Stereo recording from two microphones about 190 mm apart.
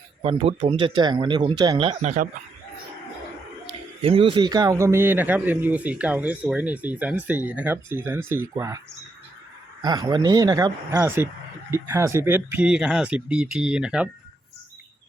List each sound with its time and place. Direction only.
0.2 s speech: 30° right (ahead or behind)
3.7 s speech: 30° right (ahead or behind)
9.8 s speech: 20° right (ahead or behind); by 14.1 s 5° right (ahead or behind)